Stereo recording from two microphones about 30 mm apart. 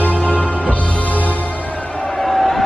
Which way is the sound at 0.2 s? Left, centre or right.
Left.